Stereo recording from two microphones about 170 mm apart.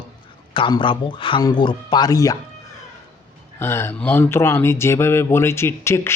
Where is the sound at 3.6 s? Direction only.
15° left (ahead or behind).